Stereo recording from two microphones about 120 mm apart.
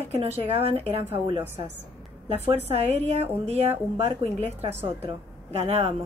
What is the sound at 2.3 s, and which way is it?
A woman's voice, 60° right (ahead or behind).